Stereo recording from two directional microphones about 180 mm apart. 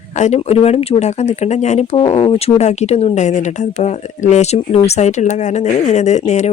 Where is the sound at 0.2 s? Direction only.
35° left (ahead or behind).